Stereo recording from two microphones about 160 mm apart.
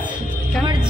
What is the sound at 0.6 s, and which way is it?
Music, 30° right (ahead or behind).